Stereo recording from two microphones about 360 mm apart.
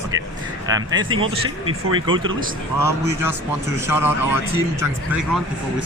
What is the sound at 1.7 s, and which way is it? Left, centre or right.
Speech, right.